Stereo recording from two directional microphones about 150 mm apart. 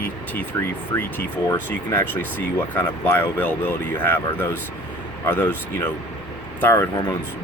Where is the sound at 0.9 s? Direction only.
20° left (ahead or behind).